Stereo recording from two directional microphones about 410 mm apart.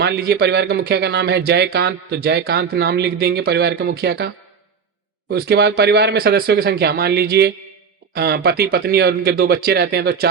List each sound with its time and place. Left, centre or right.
0.0 s speech: right
5.3 s speech: right